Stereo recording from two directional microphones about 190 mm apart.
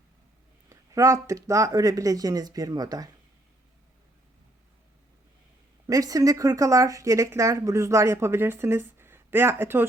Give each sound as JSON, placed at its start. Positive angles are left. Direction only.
{"t": 0.7, "sound": "speech", "side_deg": -15}
{"t": 5.9, "sound": "speech", "side_deg": -20}